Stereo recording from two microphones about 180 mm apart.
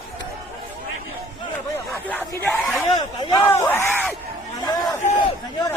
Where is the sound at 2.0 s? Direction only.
10° left (ahead or behind).